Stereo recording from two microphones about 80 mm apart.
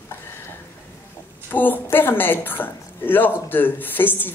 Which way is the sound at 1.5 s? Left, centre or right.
Left.